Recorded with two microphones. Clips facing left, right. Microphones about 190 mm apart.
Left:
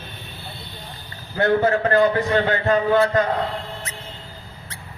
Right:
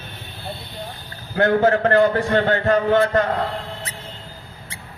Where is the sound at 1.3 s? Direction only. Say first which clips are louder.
Right 2 dB; 45° right (ahead or behind).